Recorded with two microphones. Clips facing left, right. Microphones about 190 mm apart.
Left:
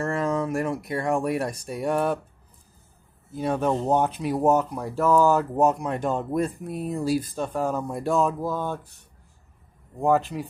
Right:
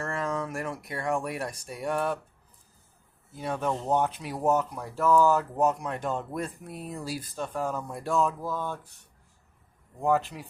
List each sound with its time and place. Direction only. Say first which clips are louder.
0.0 s speech: left 6 dB; 20° left (ahead or behind)
3.4 s speech: left 6 dB; 25° left (ahead or behind)
4.4 s speech: left 4 dB; 40° left (ahead or behind)
5.1 s speech: left 2 dB; 15° left (ahead or behind)
7.5 s speech: left 5 dB; 35° left (ahead or behind)
8.3 s speech: left 5 dB; 35° left (ahead or behind)
10.0 s speech: left 4 dB; 25° left (ahead or behind)